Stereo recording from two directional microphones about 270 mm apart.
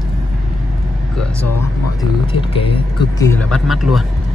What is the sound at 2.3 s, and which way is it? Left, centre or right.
Speech, centre.